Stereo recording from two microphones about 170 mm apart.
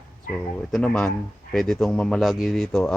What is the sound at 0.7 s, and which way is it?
Speech, 5° left (ahead or behind).